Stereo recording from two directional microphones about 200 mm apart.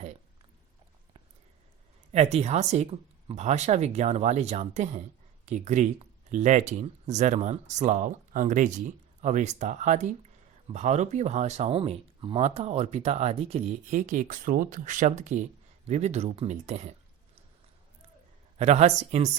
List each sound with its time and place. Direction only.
2.1 s speech: 35° right (ahead or behind)
18.5 s speech: 35° right (ahead or behind)